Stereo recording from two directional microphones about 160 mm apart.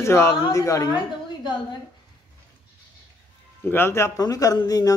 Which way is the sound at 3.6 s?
15° left (ahead or behind).